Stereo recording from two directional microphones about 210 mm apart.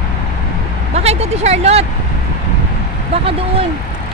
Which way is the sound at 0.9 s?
30° right (ahead or behind).